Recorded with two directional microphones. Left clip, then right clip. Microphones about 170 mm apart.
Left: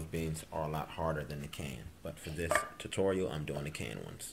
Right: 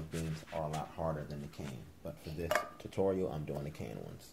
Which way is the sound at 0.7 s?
15° left (ahead or behind).